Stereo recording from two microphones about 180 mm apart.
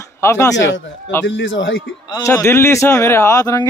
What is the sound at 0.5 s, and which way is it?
Speech, 90° left.